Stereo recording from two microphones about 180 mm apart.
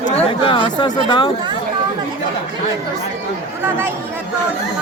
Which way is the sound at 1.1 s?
25° left (ahead or behind).